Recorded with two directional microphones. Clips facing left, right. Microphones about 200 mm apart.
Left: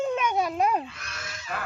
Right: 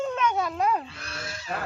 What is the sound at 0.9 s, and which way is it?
Owl, 30° right (ahead or behind).